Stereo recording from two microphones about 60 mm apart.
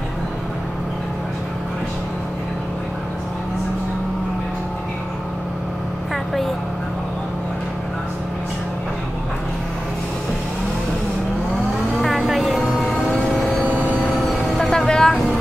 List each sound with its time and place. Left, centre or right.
12.0 s music: centre
13.7 s vehicle: right
14.5 s vehicle: centre